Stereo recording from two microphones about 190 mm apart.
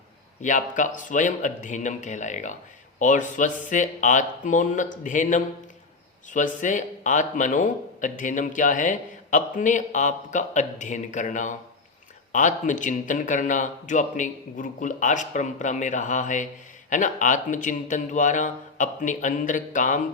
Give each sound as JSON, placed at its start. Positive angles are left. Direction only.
{"t": 0.4, "sound": "a man's voice", "side_deg": 40}